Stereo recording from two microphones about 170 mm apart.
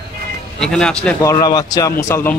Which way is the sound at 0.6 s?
5° left (ahead or behind).